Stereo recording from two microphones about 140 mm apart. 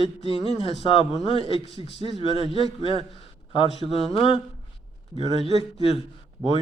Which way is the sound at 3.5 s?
40° left (ahead or behind).